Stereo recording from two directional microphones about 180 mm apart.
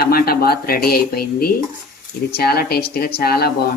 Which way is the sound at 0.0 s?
55° left (ahead or behind).